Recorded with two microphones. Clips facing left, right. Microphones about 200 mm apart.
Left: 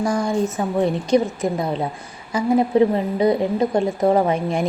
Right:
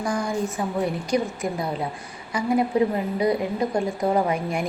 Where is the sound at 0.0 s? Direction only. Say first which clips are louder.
Left 5 dB; 25° left (ahead or behind).